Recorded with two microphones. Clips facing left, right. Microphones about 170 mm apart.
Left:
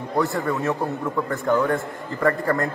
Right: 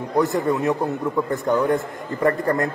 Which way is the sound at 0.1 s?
20° right (ahead or behind).